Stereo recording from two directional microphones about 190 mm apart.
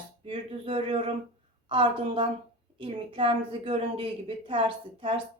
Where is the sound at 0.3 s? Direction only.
30° right (ahead or behind).